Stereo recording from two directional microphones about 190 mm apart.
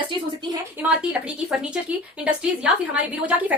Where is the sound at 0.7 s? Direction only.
5° right (ahead or behind).